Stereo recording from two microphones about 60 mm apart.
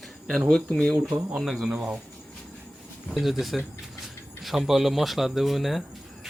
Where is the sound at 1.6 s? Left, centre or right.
Centre.